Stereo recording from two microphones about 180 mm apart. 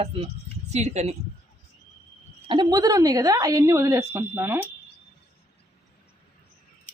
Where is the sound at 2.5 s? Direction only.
25° right (ahead or behind).